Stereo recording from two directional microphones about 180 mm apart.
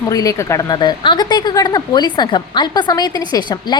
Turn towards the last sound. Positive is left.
turn(degrees=25)  # may be behind; listen again after turning